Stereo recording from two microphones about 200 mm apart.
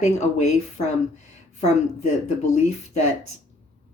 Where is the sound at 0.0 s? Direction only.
35° left (ahead or behind).